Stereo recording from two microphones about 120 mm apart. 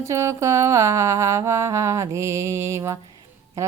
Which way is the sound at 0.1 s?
25° right (ahead or behind).